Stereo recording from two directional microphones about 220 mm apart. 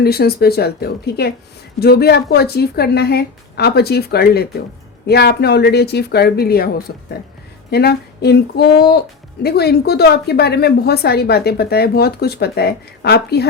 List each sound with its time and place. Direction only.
0.0 s speech: 45° left (ahead or behind)